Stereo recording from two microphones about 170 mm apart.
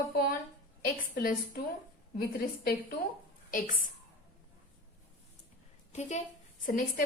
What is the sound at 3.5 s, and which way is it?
Speech, 55° left (ahead or behind).